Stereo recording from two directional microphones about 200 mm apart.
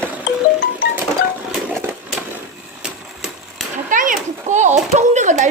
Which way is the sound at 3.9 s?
40° right (ahead or behind).